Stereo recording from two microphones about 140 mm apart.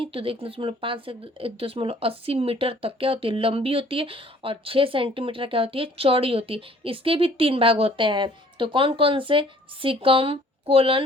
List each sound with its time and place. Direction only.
0.0 s speech: 40° right (ahead or behind)